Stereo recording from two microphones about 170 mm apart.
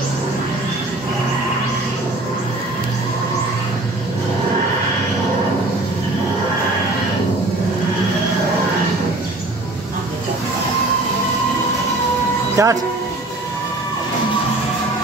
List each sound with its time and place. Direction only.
12.6 s speech: 20° right (ahead or behind)